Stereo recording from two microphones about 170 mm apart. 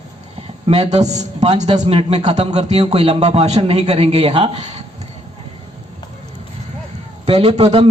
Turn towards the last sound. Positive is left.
turn(degrees=-35)  # may be behind; listen again after turning